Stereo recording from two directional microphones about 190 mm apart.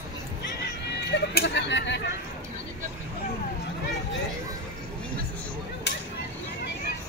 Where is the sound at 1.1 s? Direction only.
60° left (ahead or behind).